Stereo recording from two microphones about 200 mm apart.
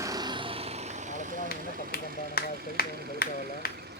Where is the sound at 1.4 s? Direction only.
50° left (ahead or behind).